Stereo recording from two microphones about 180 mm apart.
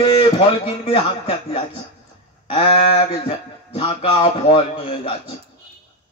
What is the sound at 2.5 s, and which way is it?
Speech, 30° left (ahead or behind).